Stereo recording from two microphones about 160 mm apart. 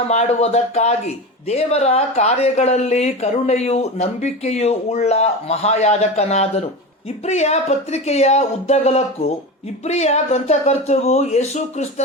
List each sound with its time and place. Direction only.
0.1 s speech: 45° left (ahead or behind)